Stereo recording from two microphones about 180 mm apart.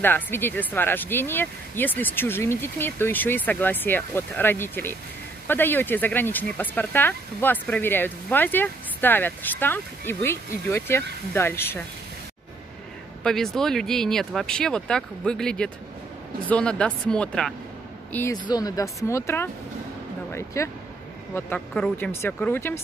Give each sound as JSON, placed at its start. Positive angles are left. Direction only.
{"t": 0.0, "sound": "speech", "side_deg": 10}
{"t": 13.2, "sound": "speech", "side_deg": 0}